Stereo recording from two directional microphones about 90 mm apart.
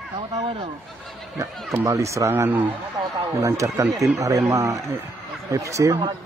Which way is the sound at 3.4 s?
35° right (ahead or behind).